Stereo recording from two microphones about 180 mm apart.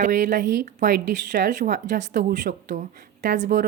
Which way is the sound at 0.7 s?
40° right (ahead or behind).